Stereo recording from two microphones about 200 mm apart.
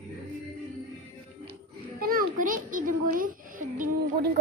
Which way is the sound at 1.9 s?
45° right (ahead or behind).